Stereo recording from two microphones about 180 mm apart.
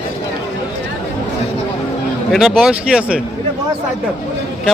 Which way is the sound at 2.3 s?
Centre (ahead or behind).